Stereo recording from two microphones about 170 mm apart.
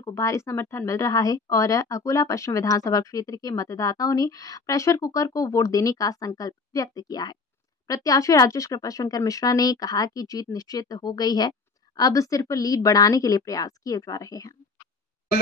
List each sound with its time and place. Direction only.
0.0 s a woman's voice: 20° left (ahead or behind)